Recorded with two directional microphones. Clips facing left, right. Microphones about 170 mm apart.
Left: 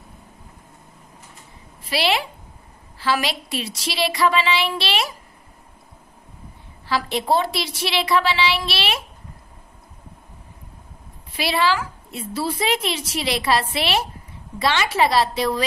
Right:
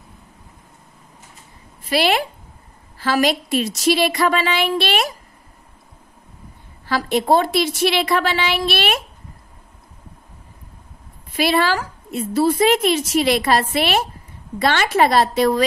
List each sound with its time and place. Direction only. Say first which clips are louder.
1.9 s a woman's voice: right 4 dB; 50° right (ahead or behind)
6.9 s a woman's voice: right 4 dB; 50° right (ahead or behind)
11.3 s a woman's voice: right 3 dB; 50° right (ahead or behind)